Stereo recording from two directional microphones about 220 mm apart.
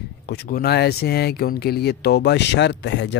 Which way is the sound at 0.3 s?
45° left (ahead or behind).